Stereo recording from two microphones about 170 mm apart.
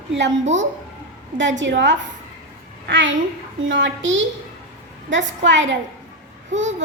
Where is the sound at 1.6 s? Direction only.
90° right.